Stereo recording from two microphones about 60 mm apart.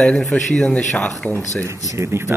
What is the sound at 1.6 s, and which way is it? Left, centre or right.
Speech, right.